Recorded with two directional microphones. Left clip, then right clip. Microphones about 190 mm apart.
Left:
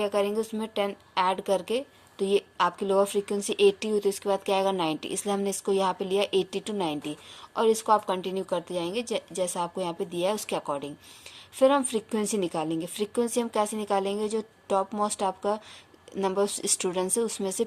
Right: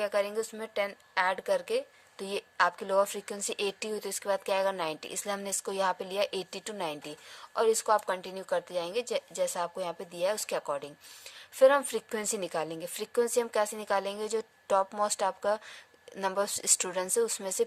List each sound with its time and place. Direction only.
0.0 s speech: 30° right (ahead or behind)